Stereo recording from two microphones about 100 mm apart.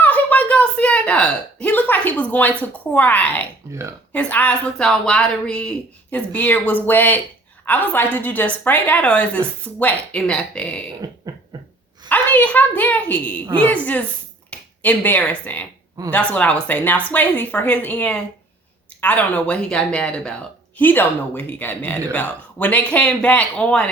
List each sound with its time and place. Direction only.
0.0 s a sound: 15° left (ahead or behind)
3.7 s speech: 30° right (ahead or behind)
4.1 s speech: 15° left (ahead or behind)
12.0 s speech: 20° left (ahead or behind)